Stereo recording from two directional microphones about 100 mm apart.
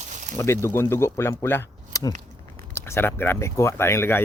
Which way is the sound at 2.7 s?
25° left (ahead or behind).